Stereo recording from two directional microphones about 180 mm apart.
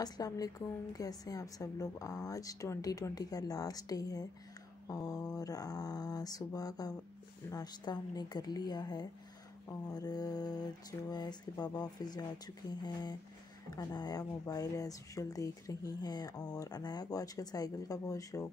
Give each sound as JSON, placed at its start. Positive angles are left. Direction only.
{"t": 0.0, "sound": "speech", "side_deg": 20}